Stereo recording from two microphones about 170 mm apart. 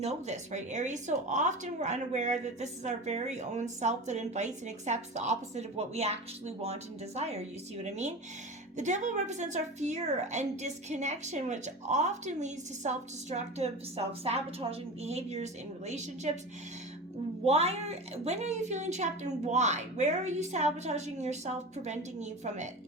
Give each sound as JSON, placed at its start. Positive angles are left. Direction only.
{"t": 0.0, "sound": "a woman's voice", "side_deg": -45}
{"t": 8.7, "sound": "speech", "side_deg": -45}
{"t": 17.4, "sound": "a woman's voice", "side_deg": -40}